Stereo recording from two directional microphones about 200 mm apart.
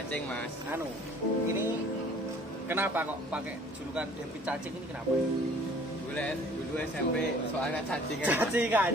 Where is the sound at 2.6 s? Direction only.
10° right (ahead or behind).